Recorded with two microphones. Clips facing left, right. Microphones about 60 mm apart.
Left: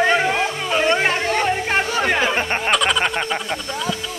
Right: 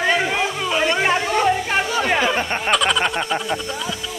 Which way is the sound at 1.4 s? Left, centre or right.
Left.